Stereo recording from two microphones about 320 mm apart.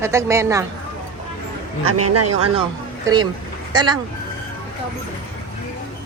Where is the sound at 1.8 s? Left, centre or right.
Right.